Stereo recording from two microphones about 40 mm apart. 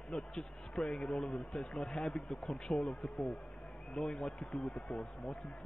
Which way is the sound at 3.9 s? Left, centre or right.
Left.